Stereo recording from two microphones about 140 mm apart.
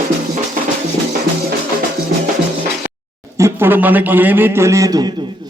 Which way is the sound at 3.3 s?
20° right (ahead or behind).